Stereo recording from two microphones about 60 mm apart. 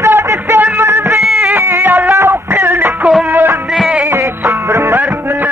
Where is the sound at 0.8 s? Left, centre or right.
Right.